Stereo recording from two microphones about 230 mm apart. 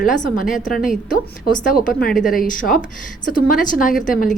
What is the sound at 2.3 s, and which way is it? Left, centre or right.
A woman's voice, left.